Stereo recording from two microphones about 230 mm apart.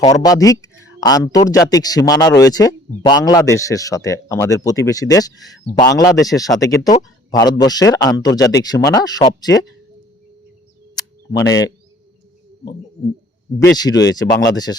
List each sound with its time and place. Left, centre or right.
0.0 s speech: centre
11.3 s speech: centre
13.7 s speech: centre